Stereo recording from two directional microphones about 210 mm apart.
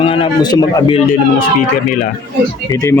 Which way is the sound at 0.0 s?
25° left (ahead or behind).